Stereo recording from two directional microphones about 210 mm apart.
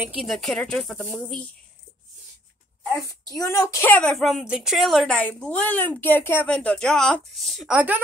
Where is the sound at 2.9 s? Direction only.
15° left (ahead or behind).